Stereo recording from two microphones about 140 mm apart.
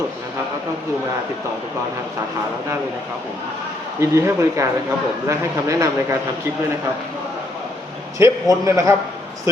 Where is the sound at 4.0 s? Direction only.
20° right (ahead or behind).